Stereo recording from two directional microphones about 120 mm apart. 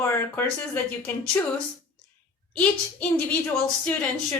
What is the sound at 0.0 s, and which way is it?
Speech, 20° left (ahead or behind).